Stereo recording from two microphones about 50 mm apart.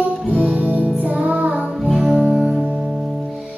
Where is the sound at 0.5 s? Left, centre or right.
Right.